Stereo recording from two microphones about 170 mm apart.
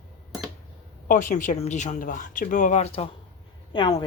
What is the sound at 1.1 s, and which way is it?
Speech, 50° left (ahead or behind).